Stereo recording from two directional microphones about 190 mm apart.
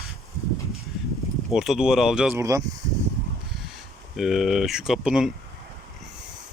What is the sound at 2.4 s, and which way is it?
Speech, 15° right (ahead or behind).